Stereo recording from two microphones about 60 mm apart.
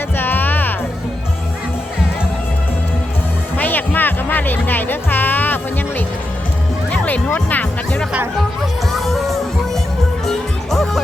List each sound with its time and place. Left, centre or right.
0.2 s music: left
3.6 s music: left
6.9 s music: left
7.3 s speech: left
8.9 s music: centre